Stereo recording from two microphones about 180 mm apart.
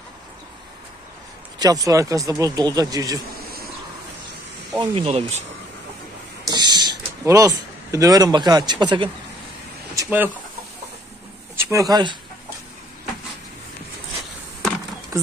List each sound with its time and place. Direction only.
1.6 s speech: 20° right (ahead or behind)
4.7 s speech: 30° right (ahead or behind)
6.5 s speech: 25° right (ahead or behind)
10.0 s speech: 10° right (ahead or behind)
11.5 s speech: 15° right (ahead or behind)